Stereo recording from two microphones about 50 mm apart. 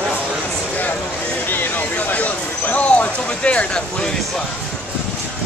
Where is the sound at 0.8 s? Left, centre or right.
Left; by 4.4 s centre.